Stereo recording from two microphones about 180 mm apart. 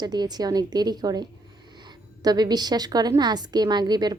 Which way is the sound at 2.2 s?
20° right (ahead or behind).